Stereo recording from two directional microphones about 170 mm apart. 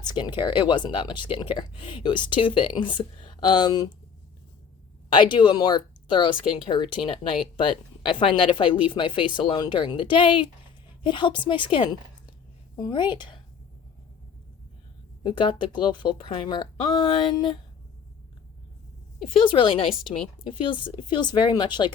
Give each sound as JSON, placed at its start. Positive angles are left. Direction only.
{"t": 0.0, "sound": "speech", "side_deg": 25}
{"t": 5.0, "sound": "a woman's voice", "side_deg": 30}
{"t": 15.2, "sound": "speech", "side_deg": 25}
{"t": 19.3, "sound": "speech", "side_deg": 30}